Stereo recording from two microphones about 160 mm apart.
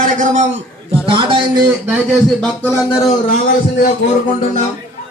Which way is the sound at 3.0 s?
50° left (ahead or behind).